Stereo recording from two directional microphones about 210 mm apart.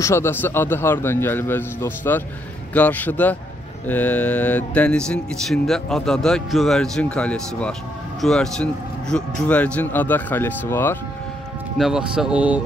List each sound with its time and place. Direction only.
0.0 s a man's voice: 10° left (ahead or behind)
11.8 s speech: centre (ahead or behind)